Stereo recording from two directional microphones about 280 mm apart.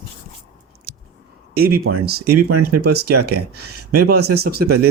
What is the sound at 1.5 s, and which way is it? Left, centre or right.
Speech, right.